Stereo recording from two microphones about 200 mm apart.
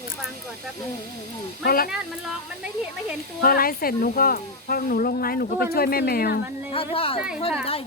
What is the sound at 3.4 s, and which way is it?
Speech, 45° left (ahead or behind).